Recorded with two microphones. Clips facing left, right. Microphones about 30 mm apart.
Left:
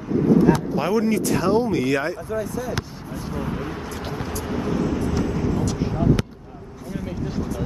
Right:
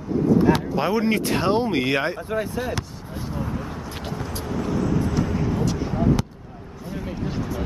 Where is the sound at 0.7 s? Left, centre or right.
Right.